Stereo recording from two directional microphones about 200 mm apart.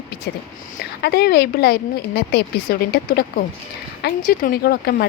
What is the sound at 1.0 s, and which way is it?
Speech, 50° left (ahead or behind).